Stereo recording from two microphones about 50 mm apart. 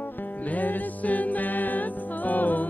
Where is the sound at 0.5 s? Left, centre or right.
Left.